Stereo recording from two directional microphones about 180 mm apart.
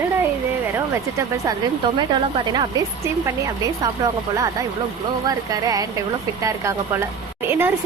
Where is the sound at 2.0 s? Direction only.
25° right (ahead or behind).